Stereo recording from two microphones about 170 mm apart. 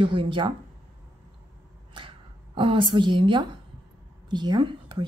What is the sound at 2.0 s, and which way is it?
Speech, 30° right (ahead or behind).